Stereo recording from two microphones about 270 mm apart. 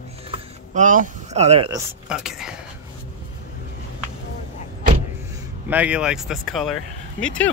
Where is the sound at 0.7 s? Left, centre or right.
Right.